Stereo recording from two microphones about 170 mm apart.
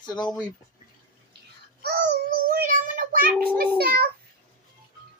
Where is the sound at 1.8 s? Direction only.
65° right (ahead or behind).